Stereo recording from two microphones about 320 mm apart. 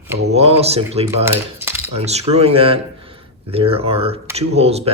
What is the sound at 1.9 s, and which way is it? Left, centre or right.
Speech, centre.